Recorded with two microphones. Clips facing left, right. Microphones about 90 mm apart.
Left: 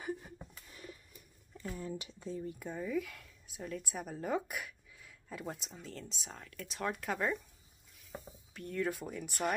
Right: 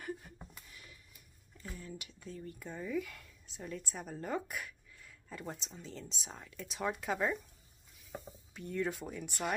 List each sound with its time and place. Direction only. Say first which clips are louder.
1.6 s speech: left 6 dB; 30° left (ahead or behind)
2.3 s speech: left 4 dB; 10° left (ahead or behind)